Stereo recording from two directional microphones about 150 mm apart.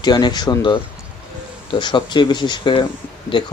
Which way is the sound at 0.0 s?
30° left (ahead or behind).